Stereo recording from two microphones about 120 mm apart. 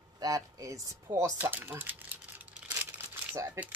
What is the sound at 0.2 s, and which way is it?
Speech, 30° right (ahead or behind).